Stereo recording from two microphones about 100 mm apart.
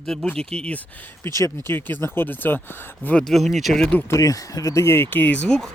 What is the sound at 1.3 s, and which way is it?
Speech, 30° left (ahead or behind).